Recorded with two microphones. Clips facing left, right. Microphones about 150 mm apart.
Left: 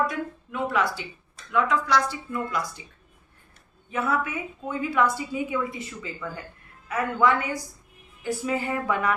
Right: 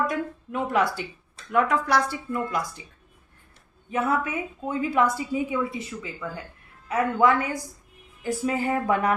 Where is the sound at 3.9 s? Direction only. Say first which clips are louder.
Right 2 dB; 40° right (ahead or behind).